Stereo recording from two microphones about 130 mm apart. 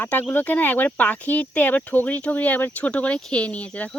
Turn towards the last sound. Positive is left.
turn(degrees=10)  # may be behind; listen again after turning